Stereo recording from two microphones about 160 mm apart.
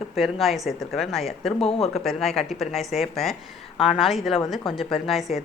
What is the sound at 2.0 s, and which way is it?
Speech, centre (ahead or behind).